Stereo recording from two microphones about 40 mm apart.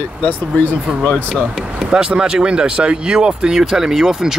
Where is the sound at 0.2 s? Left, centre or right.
Left.